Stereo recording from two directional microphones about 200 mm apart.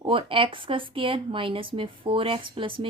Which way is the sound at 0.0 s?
25° right (ahead or behind).